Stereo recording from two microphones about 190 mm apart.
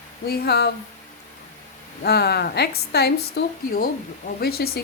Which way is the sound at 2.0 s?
60° left (ahead or behind).